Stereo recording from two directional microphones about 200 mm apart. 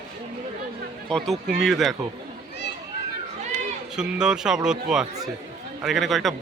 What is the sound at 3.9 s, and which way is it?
A man's voice, 5° right (ahead or behind).